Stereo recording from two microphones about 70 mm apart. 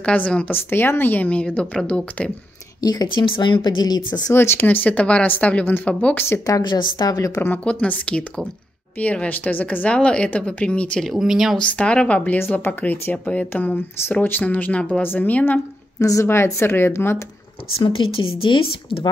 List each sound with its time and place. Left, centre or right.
0.0 s a woman's voice: centre
0.5 s speech: left; by 2.3 s centre
2.8 s speech: left
4.3 s speech: left
6.4 s a woman's voice: left
7.2 s speech: left
7.6 s a woman's voice: centre
11.1 s speech: centre
11.5 s a woman's voice: centre
12.4 s speech: left
16.0 s speech: left
16.3 s speech: left